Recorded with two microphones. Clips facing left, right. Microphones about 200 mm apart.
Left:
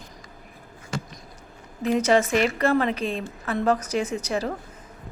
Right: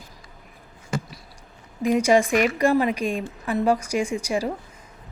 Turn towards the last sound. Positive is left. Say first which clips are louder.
# right 2 dB
turn(degrees=-10)  # may be behind; listen again after turning